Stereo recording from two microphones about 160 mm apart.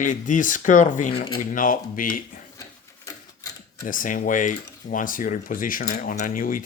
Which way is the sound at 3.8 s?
55° left (ahead or behind).